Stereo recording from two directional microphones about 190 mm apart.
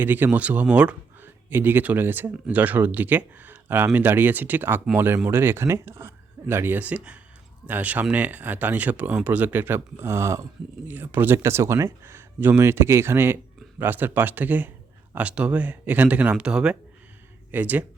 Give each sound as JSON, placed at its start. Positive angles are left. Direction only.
{"t": 0.0, "sound": "speech", "side_deg": -10}